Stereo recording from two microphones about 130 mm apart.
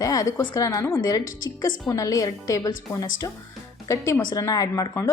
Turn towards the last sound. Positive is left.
turn(degrees=25)  # may be behind; listen again after turning